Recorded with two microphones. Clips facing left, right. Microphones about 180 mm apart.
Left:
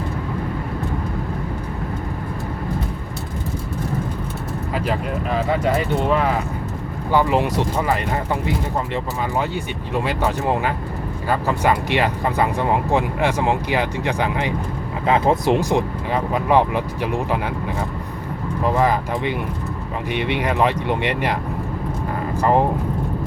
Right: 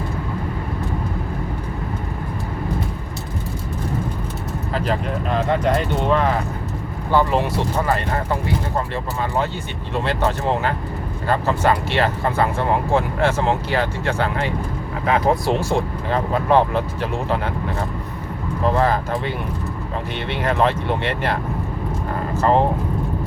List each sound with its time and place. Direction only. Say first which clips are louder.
4.7 s speech: right 1 dB; 10° left (ahead or behind)
9.9 s speech: even; 10° left (ahead or behind)
15.0 s speech: left 1 dB; 25° left (ahead or behind)
15.5 s speech: left 2 dB; 15° left (ahead or behind)
18.8 s speech: even; 15° left (ahead or behind)
22.4 s speech: even; 15° left (ahead or behind)